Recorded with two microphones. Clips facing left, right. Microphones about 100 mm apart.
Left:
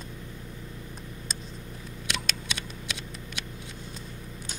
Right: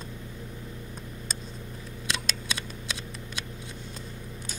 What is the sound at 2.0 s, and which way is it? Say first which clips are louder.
Scissors: right 1 dB; 35° right (ahead or behind).